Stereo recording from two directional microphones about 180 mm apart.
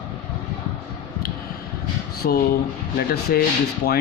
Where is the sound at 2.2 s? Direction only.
55° left (ahead or behind).